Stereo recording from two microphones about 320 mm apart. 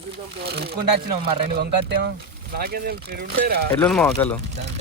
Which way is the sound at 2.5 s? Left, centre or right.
Right.